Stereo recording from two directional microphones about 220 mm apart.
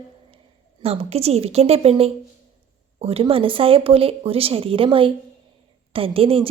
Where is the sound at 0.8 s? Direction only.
25° right (ahead or behind).